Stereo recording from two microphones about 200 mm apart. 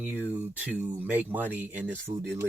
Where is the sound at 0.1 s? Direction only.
10° right (ahead or behind).